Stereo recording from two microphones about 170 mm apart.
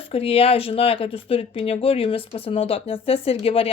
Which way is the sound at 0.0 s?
35° left (ahead or behind).